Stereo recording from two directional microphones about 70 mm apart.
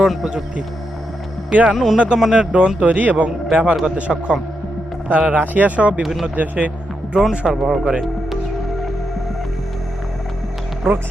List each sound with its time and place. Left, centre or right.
0.0 s speech: centre
0.3 s a man's voice: centre
1.7 s speech: centre
2.4 s a man's voice: centre
6.0 s speech: centre
6.3 s a man's voice: right
7.2 s speech: centre